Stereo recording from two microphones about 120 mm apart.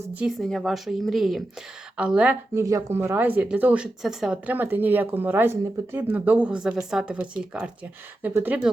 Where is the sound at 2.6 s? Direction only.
25° right (ahead or behind).